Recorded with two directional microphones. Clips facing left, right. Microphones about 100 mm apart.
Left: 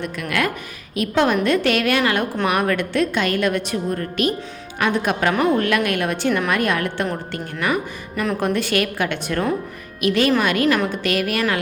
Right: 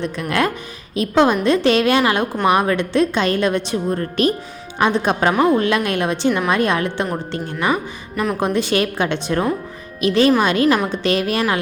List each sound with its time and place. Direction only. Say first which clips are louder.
0.0 s a woman's voice: right 3 dB; 30° right (ahead or behind)